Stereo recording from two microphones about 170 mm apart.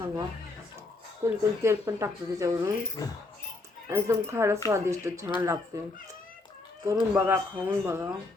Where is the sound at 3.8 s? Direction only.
15° right (ahead or behind).